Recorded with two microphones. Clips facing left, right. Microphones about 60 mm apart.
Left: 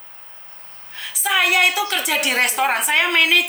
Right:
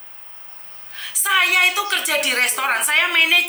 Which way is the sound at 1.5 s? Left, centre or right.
Centre.